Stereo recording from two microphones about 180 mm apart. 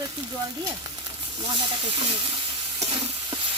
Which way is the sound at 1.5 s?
30° right (ahead or behind).